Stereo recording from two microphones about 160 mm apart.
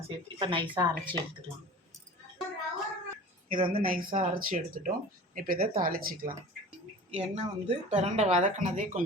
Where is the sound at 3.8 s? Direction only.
60° right (ahead or behind).